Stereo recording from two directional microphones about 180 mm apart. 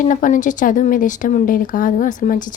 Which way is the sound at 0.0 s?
45° left (ahead or behind).